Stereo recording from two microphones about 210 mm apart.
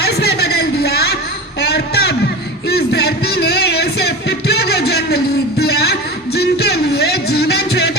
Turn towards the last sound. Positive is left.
turn(degrees=50)  # may be behind; listen again after turning